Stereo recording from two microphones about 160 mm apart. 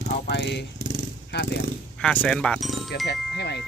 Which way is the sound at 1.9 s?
5° left (ahead or behind).